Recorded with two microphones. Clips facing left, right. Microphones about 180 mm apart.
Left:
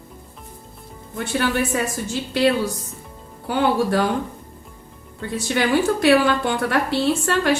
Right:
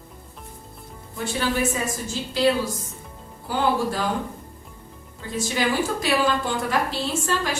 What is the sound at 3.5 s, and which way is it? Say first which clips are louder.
Speech: left 4 dB; 65° left (ahead or behind).